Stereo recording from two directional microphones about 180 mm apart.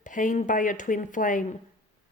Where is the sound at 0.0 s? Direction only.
45° left (ahead or behind).